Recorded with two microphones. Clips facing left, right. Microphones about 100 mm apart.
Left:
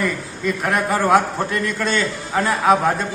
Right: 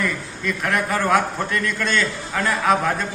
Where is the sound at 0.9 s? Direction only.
15° left (ahead or behind).